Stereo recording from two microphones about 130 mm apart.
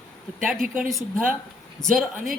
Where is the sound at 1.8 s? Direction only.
5° left (ahead or behind).